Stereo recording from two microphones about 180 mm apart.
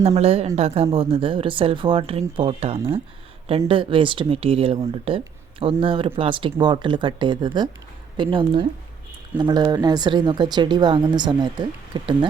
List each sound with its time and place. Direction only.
0.0 s a woman's voice: 35° right (ahead or behind)